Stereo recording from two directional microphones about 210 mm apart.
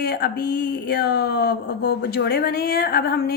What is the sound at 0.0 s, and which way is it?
A woman's voice, 50° left (ahead or behind).